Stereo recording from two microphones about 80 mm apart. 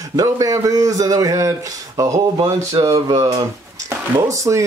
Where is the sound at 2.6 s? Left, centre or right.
Right.